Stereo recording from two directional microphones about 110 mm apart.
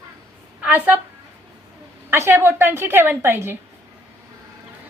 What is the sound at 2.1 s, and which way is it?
A woman's voice, 25° right (ahead or behind).